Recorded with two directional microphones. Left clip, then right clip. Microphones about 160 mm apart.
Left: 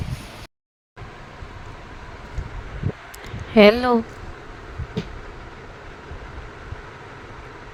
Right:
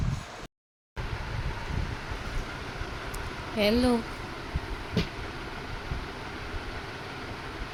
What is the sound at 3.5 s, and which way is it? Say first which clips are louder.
Speech: left 12 dB; 55° left (ahead or behind).